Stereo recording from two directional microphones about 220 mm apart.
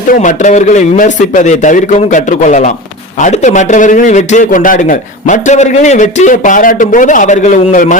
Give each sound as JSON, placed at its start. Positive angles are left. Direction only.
{"t": 0.1, "sound": "a man's voice", "side_deg": 35}